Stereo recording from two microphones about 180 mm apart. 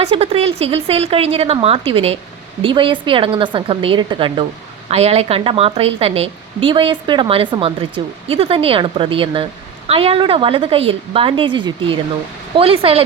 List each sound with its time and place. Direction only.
0.0 s a woman's voice: 35° right (ahead or behind)